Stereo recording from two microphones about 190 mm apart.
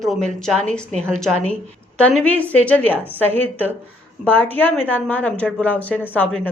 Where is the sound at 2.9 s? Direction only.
10° right (ahead or behind).